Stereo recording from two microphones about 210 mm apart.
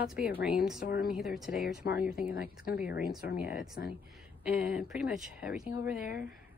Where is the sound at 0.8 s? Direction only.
45° left (ahead or behind).